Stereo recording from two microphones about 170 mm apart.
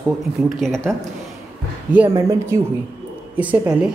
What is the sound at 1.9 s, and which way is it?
A woman's voice, 15° right (ahead or behind).